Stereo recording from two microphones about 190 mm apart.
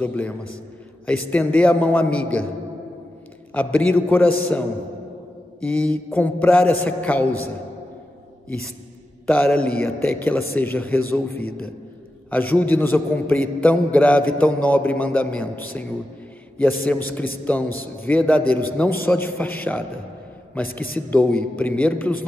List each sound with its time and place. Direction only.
0.0 s a man's voice: 5° left (ahead or behind)
3.5 s a man's voice: 10° left (ahead or behind)
9.2 s a man's voice: 5° left (ahead or behind)
11.3 s a man's voice: 50° left (ahead or behind)
12.3 s a man's voice: 10° left (ahead or behind)